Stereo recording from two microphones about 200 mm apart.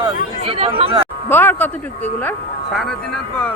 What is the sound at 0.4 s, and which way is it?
Speech, 30° right (ahead or behind).